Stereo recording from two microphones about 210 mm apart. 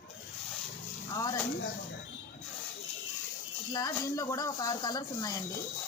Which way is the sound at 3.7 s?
20° left (ahead or behind).